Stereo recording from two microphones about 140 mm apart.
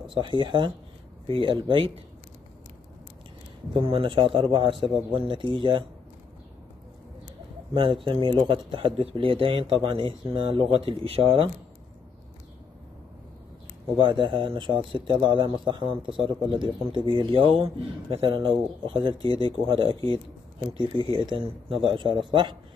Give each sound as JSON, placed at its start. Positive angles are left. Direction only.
{"t": 0.0, "sound": "speech", "side_deg": -35}
{"t": 3.8, "sound": "speech", "side_deg": -35}
{"t": 7.7, "sound": "speech", "side_deg": -35}
{"t": 13.9, "sound": "speech", "side_deg": -35}